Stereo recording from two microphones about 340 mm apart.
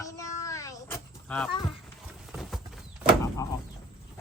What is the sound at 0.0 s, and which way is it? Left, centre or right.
Vehicle, centre.